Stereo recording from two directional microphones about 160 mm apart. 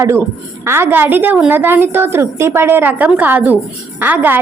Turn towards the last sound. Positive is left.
turn(degrees=-10)  # may be behind; listen again after turning